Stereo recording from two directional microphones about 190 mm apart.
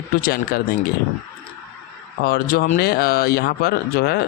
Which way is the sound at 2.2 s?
50° left (ahead or behind).